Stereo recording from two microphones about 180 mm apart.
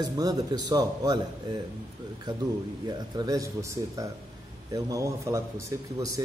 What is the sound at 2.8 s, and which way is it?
Speech, 20° right (ahead or behind).